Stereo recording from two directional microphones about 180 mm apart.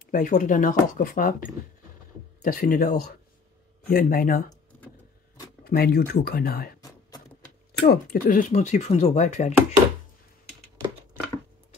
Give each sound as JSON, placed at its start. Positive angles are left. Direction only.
{"t": 0.0, "sound": "speech", "side_deg": 45}
{"t": 4.7, "sound": "vehicle", "side_deg": 10}
{"t": 5.6, "sound": "speech", "side_deg": 60}
{"t": 7.8, "sound": "speech", "side_deg": 60}